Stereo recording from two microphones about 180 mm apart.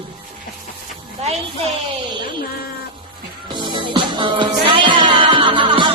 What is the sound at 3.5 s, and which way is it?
Music, 25° right (ahead or behind).